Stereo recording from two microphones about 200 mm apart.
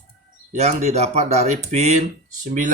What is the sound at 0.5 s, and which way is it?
Speech, 35° right (ahead or behind).